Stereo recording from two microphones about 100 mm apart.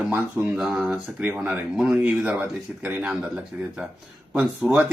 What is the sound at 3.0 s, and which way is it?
Speech, 10° right (ahead or behind).